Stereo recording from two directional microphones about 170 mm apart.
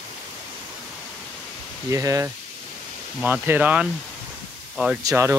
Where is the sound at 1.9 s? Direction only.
20° right (ahead or behind).